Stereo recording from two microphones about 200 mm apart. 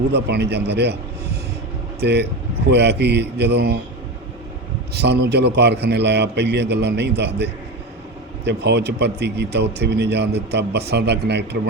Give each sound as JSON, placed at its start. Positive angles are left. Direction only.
{"t": 0.1, "sound": "a man's voice", "side_deg": -55}
{"t": 2.0, "sound": "a man's voice", "side_deg": -55}
{"t": 4.9, "sound": "a man's voice", "side_deg": -55}